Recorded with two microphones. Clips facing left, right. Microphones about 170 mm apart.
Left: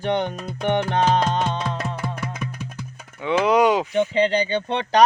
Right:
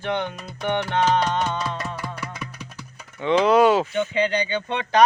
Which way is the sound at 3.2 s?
10° left (ahead or behind).